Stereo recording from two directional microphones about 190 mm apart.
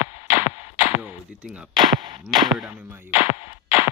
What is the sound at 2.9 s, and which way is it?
Music, 10° right (ahead or behind).